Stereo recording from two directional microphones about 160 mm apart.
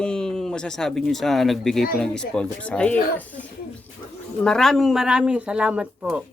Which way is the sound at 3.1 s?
10° left (ahead or behind).